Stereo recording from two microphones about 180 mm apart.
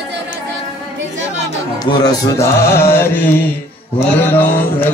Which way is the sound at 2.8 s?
15° left (ahead or behind).